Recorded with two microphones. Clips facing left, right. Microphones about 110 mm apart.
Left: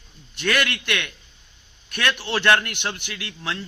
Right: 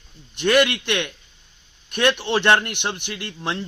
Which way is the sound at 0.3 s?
15° right (ahead or behind).